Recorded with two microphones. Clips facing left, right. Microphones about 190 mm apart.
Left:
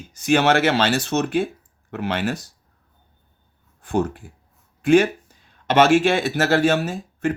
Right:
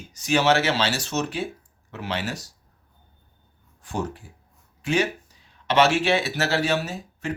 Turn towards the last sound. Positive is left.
turn(degrees=50)  # may be behind; listen again after turning